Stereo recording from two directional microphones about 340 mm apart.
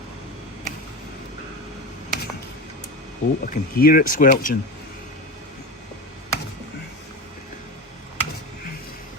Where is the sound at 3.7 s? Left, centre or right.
Left.